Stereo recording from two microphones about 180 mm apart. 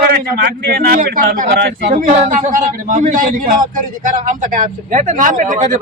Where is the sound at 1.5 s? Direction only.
80° right.